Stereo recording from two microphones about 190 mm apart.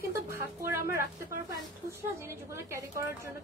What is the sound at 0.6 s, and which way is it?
Speech, 15° right (ahead or behind).